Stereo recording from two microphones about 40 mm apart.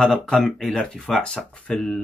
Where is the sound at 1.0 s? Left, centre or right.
Left.